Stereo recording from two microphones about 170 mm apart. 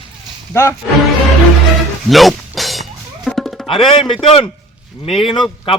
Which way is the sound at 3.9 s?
30° left (ahead or behind).